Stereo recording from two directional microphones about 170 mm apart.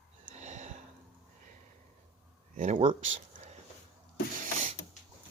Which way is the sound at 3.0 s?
40° right (ahead or behind).